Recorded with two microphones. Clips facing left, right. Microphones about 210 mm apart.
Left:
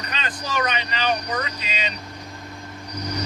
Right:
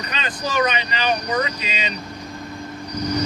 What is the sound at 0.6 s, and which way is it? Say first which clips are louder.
Speech: right 2 dB; 15° right (ahead or behind).